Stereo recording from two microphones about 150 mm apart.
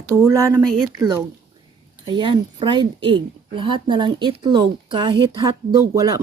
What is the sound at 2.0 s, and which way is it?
A woman's voice, 30° right (ahead or behind).